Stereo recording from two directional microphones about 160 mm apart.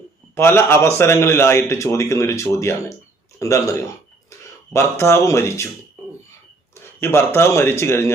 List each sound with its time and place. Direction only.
0.3 s a man's voice: 15° left (ahead or behind)
7.0 s speech: 15° left (ahead or behind)